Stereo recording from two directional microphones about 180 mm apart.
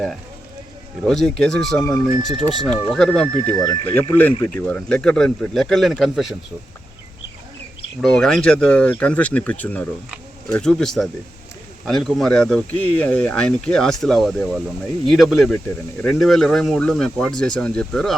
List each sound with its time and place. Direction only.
1.0 s speech: 5° left (ahead or behind)
3.5 s speech: 20° left (ahead or behind)
3.8 s speech: 10° left (ahead or behind)
8.0 s speech: centre (ahead or behind)